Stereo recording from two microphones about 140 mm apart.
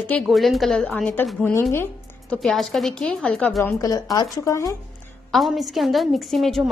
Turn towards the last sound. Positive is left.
turn(degrees=0)  # may be behind; listen again after turning